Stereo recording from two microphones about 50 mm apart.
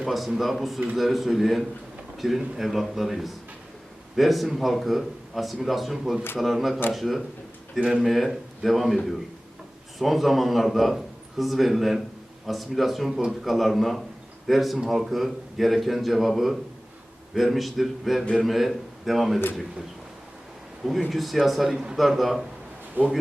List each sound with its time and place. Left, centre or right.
0.0 s a man's voice: centre
7.8 s speech: centre
8.0 s a man's voice: centre
10.0 s a man's voice: centre
21.1 s a man's voice: centre
23.0 s speech: right